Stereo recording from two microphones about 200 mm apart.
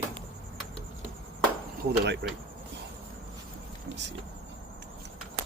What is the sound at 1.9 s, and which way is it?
Speech, 55° right (ahead or behind).